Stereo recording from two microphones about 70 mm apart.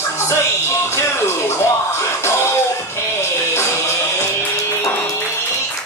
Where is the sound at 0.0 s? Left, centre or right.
Left.